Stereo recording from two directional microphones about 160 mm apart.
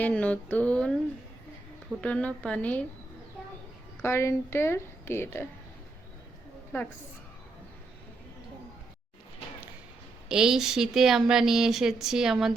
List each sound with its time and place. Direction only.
0.0 s a woman's voice: 10° left (ahead or behind)
2.0 s a woman's voice: 5° left (ahead or behind)
4.0 s a woman's voice: 15° left (ahead or behind)
10.2 s speech: 5° right (ahead or behind)